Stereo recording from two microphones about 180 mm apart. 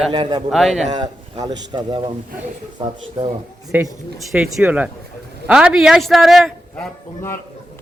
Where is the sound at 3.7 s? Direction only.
10° right (ahead or behind).